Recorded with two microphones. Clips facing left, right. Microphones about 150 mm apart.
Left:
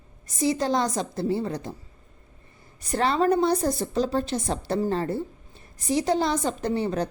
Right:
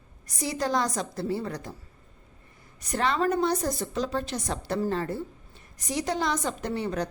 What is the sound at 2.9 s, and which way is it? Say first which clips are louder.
A woman's voice: left 4 dB; 35° left (ahead or behind).